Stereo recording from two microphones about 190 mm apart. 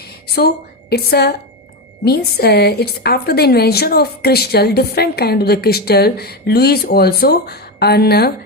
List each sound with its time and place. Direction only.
0.3 s a woman's voice: 55° left (ahead or behind)